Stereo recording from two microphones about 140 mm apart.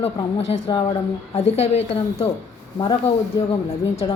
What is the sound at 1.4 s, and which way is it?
Speech, 50° left (ahead or behind).